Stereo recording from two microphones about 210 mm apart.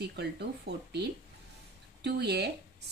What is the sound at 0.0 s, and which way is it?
Speech, 50° right (ahead or behind).